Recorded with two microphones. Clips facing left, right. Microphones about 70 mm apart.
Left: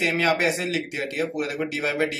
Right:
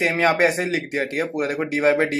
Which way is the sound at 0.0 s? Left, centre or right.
Right.